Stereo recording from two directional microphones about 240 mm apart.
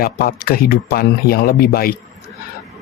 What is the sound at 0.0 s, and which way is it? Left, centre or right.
Speech, left.